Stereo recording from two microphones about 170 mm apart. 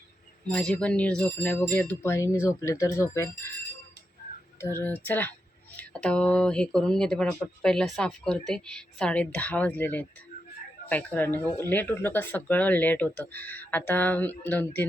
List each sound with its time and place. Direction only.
0.4 s speech: 5° left (ahead or behind)
4.6 s speech: 15° left (ahead or behind)